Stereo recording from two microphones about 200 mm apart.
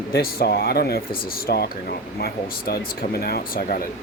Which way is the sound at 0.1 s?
50° left (ahead or behind).